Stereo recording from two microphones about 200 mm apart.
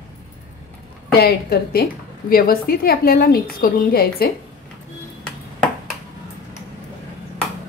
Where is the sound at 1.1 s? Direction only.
50° left (ahead or behind).